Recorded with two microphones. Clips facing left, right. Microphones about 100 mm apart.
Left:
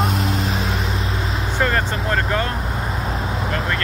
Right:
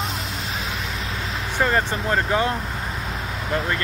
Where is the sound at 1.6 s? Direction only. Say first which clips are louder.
Even; 15° right (ahead or behind).